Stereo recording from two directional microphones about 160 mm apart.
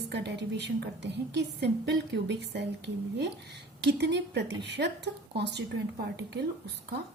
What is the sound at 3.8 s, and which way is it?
A woman's voice, 90° right.